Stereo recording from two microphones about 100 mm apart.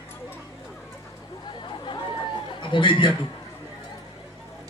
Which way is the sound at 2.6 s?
55° left (ahead or behind).